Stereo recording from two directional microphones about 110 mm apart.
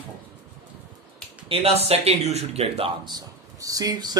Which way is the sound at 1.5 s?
60° right (ahead or behind).